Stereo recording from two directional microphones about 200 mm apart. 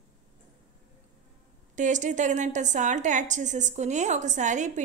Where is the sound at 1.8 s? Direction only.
40° right (ahead or behind).